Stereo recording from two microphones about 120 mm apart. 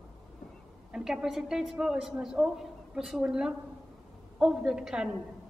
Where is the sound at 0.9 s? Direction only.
5° right (ahead or behind).